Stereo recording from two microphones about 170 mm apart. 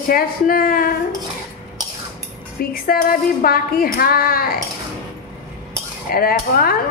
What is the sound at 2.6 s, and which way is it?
A woman's voice, 60° left (ahead or behind).